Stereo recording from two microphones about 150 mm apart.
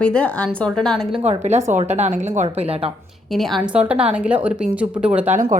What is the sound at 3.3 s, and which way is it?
A woman's voice, centre (ahead or behind).